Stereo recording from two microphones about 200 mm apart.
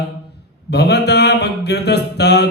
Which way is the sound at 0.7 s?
55° left (ahead or behind).